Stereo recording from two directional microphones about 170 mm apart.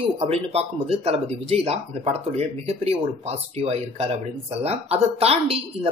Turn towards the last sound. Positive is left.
turn(degrees=-35)  # may be behind; listen again after turning